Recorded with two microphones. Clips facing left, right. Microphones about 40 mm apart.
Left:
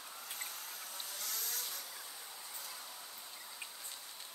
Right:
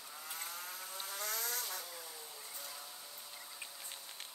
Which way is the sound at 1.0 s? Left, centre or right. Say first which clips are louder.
Right 5 dB; right.